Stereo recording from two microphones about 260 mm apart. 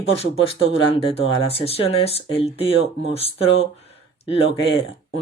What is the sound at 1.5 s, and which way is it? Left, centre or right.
Speech, left.